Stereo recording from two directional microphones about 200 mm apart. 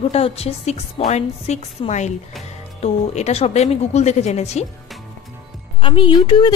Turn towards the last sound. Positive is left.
turn(degrees=25)  # may be behind; listen again after turning